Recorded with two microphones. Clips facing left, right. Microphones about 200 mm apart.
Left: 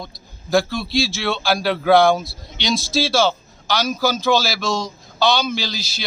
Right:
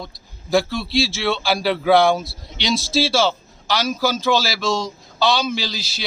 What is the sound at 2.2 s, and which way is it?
Speech, 30° right (ahead or behind).